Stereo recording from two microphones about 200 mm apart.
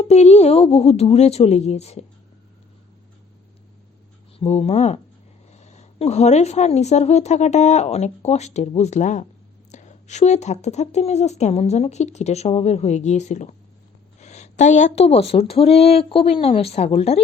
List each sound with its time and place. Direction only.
0.0 s a woman's voice: 35° left (ahead or behind)
4.4 s a woman's voice: 30° left (ahead or behind)